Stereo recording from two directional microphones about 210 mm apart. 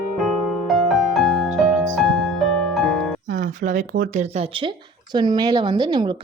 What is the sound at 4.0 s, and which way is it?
Speech, 30° right (ahead or behind).